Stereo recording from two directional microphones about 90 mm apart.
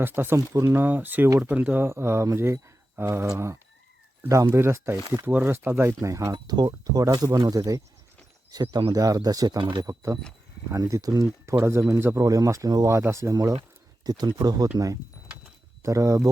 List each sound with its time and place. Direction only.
0.0 s speech: 25° right (ahead or behind)
6.3 s speech: 50° right (ahead or behind)
9.6 s speech: 65° right (ahead or behind)
9.8 s speech: 35° right (ahead or behind)
12.2 s speech: 40° right (ahead or behind)
15.8 s speech: 35° right (ahead or behind)